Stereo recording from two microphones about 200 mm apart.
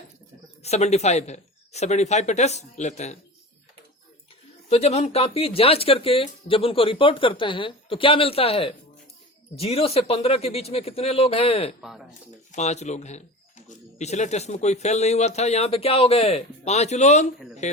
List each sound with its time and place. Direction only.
0.6 s speech: 35° left (ahead or behind)
4.7 s speech: 30° left (ahead or behind)
11.8 s speech: centre (ahead or behind)
12.5 s speech: 35° left (ahead or behind)